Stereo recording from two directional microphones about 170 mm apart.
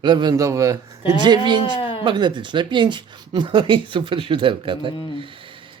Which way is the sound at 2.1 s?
25° right (ahead or behind).